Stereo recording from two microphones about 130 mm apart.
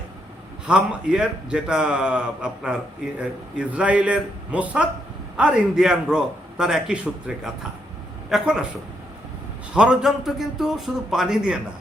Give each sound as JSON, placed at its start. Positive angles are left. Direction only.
{"t": 0.7, "sound": "a man's voice", "side_deg": -5}
{"t": 9.7, "sound": "a man's voice", "side_deg": -5}